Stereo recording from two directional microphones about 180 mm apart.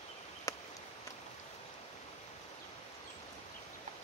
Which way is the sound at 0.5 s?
20° left (ahead or behind).